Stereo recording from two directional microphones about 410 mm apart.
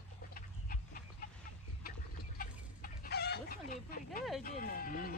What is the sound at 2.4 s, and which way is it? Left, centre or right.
Chicken, left.